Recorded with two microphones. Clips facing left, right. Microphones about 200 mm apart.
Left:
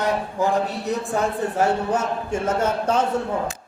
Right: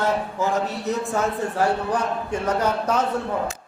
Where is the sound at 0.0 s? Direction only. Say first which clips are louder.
Left 1 dB; 15° left (ahead or behind).